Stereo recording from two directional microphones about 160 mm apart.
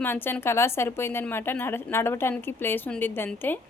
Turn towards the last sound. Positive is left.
turn(degrees=10)  # may be behind; listen again after turning